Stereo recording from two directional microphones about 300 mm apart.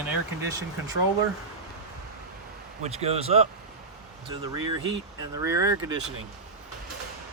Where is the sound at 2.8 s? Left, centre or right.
Right.